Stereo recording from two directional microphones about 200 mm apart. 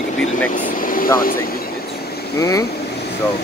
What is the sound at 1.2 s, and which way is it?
Vehicle, 45° left (ahead or behind).